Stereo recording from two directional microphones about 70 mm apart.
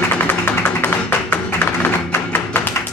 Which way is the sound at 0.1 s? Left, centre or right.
Left.